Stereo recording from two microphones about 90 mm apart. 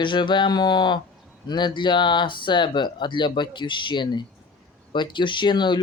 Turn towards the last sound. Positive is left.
turn(degrees=55)  # may be behind; listen again after turning